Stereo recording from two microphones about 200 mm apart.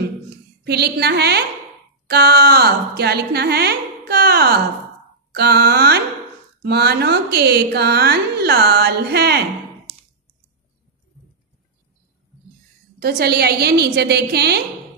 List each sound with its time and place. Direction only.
0.7 s a woman's voice: 55° right (ahead or behind)
13.0 s a woman's voice: 50° right (ahead or behind)